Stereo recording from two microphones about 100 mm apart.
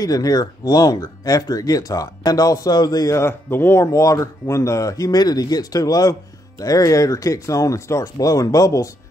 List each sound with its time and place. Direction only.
0.0 s speech: 35° left (ahead or behind)